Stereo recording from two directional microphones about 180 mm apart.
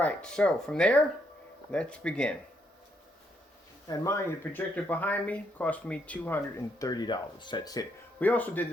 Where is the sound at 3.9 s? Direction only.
15° left (ahead or behind).